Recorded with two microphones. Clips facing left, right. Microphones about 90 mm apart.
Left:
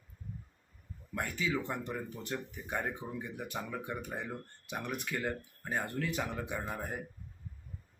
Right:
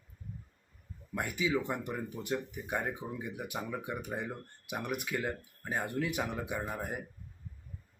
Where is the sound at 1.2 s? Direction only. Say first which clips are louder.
Right 2 dB; 10° right (ahead or behind).